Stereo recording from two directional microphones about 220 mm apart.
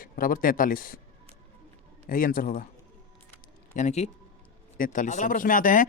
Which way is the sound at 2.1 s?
40° left (ahead or behind).